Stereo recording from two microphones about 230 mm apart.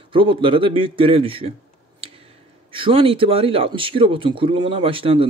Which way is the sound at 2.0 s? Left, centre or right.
Right.